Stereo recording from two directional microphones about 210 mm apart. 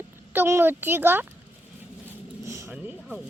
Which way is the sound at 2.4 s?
15° right (ahead or behind).